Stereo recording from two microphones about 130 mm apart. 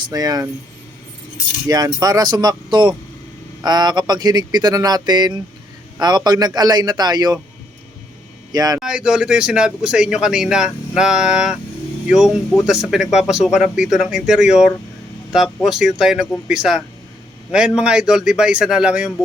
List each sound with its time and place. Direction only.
0.1 s speech: 30° right (ahead or behind)
1.6 s speech: 30° right (ahead or behind)
8.5 s speech: 30° right (ahead or behind)
8.8 s a man's voice: 5° right (ahead or behind)